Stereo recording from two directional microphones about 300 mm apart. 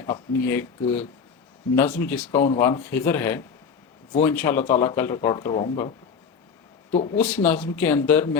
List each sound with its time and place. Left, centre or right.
0.0 s speech: centre
6.9 s speech: centre
7.2 s speech: centre